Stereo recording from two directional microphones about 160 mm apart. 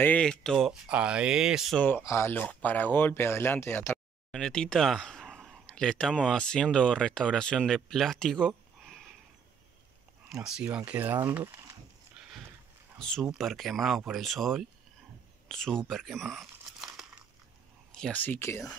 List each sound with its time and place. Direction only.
0.0 s speech: 5° left (ahead or behind)
1.8 s speech: 10° left (ahead or behind)
10.3 s speech: 5° right (ahead or behind)
13.0 s speech: centre (ahead or behind)